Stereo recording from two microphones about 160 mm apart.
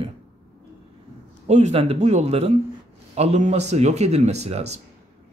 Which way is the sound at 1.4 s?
45° right (ahead or behind).